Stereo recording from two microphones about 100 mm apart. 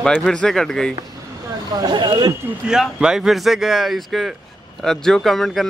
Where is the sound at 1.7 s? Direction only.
45° right (ahead or behind).